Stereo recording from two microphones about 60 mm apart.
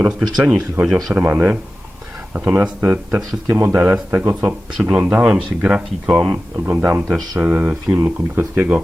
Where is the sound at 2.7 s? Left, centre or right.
Centre.